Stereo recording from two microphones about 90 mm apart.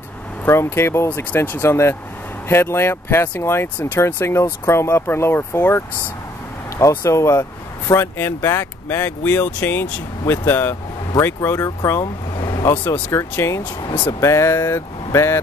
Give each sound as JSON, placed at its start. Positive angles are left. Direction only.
{"t": 0.5, "sound": "speech", "side_deg": 30}
{"t": 12.4, "sound": "vehicle", "side_deg": 55}
{"t": 12.6, "sound": "speech", "side_deg": 20}